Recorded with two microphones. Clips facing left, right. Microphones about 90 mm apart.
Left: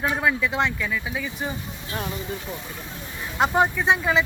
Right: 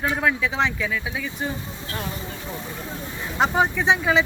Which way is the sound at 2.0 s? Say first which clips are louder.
Left 1 dB; 35° right (ahead or behind).